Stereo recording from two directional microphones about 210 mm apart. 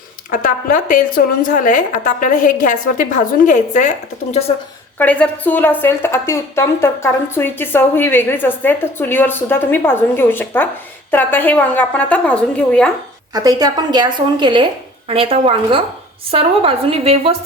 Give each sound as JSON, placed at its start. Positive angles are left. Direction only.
{"t": 0.3, "sound": "a woman's voice", "side_deg": 40}
{"t": 4.9, "sound": "a woman's voice", "side_deg": 5}
{"t": 13.3, "sound": "a woman's voice", "side_deg": -15}